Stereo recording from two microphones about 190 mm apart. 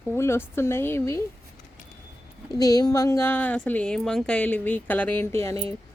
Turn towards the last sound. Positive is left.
turn(degrees=15)  # may be behind; listen again after turning